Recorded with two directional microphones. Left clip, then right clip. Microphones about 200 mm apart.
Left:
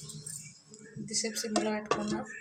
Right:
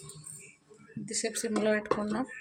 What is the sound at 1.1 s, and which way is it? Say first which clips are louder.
Speech: even; 45° right (ahead or behind).